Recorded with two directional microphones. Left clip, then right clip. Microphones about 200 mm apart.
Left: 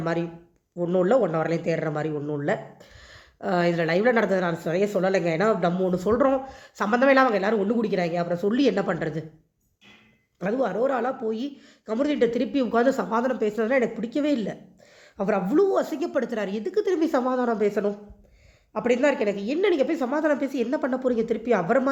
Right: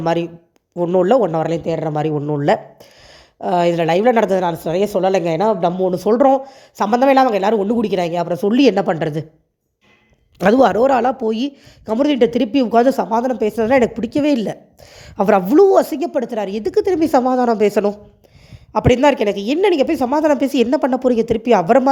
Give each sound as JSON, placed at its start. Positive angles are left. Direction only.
{"t": 0.8, "sound": "a man's voice", "side_deg": -35}
{"t": 10.3, "sound": "a man's voice", "side_deg": -50}